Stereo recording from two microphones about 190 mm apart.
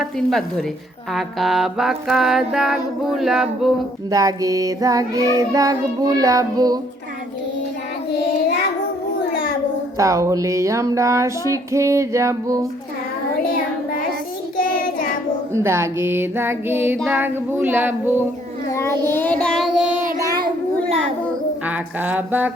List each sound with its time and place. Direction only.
0.0 s stir: centre (ahead or behind)
1.1 s music: centre (ahead or behind)
4.1 s child singing: 20° right (ahead or behind)
9.3 s child singing: 50° left (ahead or behind)
10.0 s child singing: 15° right (ahead or behind)
14.5 s child singing: 45° left (ahead or behind)
15.5 s child singing: 15° right (ahead or behind)
18.7 s child singing: 15° left (ahead or behind)
21.7 s child singing: 10° right (ahead or behind)